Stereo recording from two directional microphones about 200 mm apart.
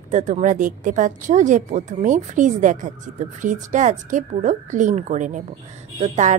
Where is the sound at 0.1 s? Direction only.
35° right (ahead or behind).